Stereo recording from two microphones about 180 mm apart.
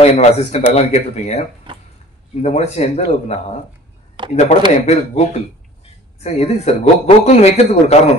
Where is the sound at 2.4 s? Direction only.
35° left (ahead or behind).